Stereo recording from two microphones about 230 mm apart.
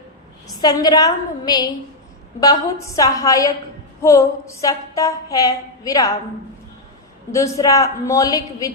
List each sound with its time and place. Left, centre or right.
0.6 s a woman's voice: centre
7.3 s a woman's voice: centre